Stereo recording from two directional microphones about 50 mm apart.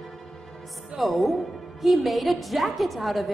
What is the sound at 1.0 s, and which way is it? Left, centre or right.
A woman's voice, centre.